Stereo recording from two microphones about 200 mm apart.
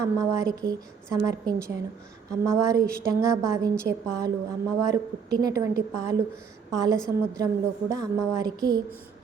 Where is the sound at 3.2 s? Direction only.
15° right (ahead or behind).